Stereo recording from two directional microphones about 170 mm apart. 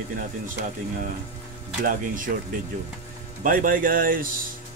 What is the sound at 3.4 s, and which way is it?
Speech, 55° right (ahead or behind).